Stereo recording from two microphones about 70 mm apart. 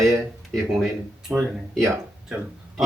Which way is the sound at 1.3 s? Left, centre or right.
Centre.